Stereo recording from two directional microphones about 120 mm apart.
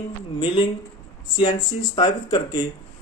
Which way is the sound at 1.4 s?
40° left (ahead or behind).